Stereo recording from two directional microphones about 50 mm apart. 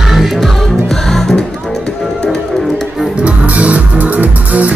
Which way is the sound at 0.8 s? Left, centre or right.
Centre.